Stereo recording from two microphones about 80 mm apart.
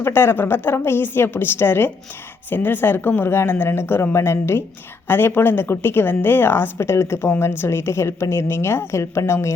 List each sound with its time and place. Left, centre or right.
0.0 s a woman's voice: left